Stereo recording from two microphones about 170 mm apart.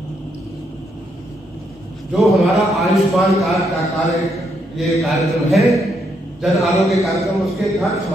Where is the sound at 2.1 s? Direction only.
Centre (ahead or behind).